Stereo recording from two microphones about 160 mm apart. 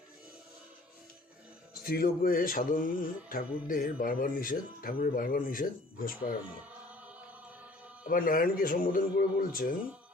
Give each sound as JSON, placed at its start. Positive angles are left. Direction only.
{"t": 1.8, "sound": "music", "side_deg": 65}
{"t": 8.0, "sound": "music", "side_deg": 60}